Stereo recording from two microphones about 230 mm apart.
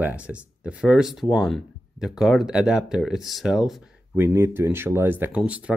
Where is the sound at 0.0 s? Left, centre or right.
Centre.